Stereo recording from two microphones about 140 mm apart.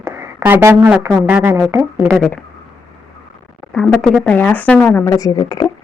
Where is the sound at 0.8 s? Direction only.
10° right (ahead or behind).